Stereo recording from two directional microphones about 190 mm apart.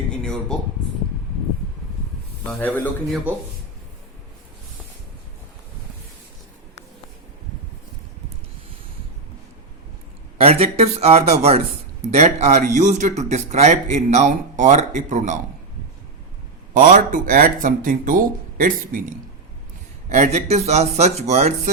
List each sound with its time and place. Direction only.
0.1 s a sound: 5° left (ahead or behind)
2.5 s a man's voice: 10° left (ahead or behind)
10.4 s a man's voice: 30° right (ahead or behind)
16.7 s a man's voice: 45° right (ahead or behind)